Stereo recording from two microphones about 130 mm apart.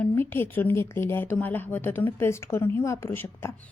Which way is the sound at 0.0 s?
15° left (ahead or behind).